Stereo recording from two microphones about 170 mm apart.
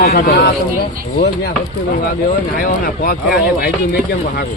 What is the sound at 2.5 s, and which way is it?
Speech, 60° left (ahead or behind).